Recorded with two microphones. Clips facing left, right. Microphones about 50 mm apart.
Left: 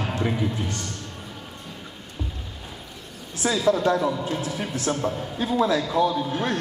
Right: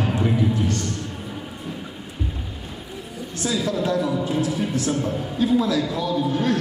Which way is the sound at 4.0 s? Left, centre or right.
Centre.